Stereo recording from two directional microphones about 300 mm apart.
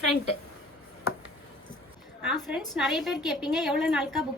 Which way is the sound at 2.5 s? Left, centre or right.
Centre.